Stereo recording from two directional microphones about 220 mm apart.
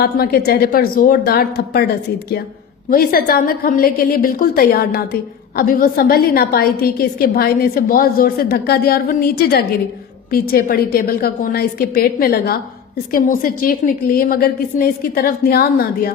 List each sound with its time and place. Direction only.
0.0 s a woman's voice: 45° left (ahead or behind)
2.9 s a woman's voice: 40° left (ahead or behind)